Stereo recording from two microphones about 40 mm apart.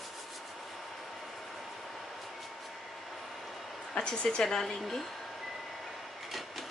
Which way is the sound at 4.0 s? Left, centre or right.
Left.